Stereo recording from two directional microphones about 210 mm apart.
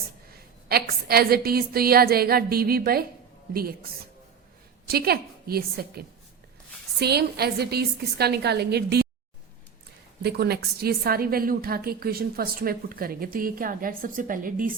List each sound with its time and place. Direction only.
0.3 s a woman's voice: 45° right (ahead or behind)
4.9 s a woman's voice: 45° right (ahead or behind)
10.2 s a woman's voice: 50° right (ahead or behind)